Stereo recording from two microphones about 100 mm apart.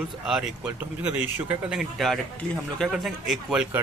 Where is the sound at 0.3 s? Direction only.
5° right (ahead or behind).